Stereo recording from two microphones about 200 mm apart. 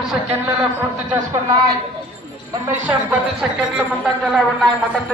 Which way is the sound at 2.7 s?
10° right (ahead or behind).